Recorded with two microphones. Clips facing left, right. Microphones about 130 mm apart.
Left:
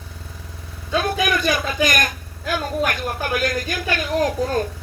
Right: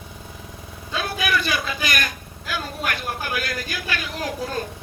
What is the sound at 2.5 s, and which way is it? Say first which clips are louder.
Speech: left 6 dB; 45° left (ahead or behind).